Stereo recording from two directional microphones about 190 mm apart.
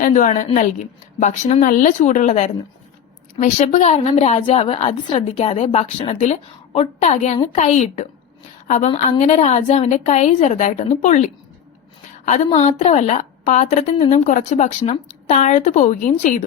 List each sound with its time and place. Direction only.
0.0 s a woman's voice: 40° left (ahead or behind)
12.5 s a woman's voice: 30° left (ahead or behind)